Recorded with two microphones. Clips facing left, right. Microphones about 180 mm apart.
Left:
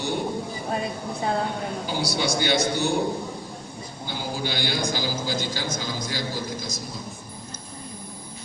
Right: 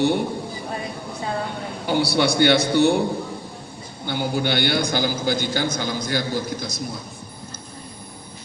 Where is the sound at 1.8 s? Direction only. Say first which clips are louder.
Right 9 dB; 60° right (ahead or behind).